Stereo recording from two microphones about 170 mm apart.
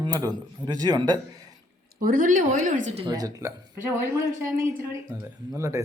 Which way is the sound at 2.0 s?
55° right (ahead or behind).